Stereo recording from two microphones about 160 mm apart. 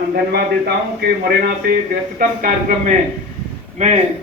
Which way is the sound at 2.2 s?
70° right (ahead or behind).